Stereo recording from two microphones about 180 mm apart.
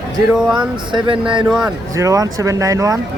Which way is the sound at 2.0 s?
20° right (ahead or behind).